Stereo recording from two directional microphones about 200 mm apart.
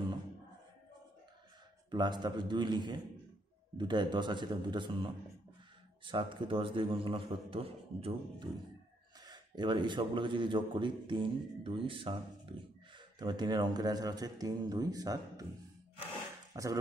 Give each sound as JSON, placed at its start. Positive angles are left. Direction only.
{"t": 1.9, "sound": "a man's voice", "side_deg": -20}
{"t": 16.5, "sound": "speech", "side_deg": -15}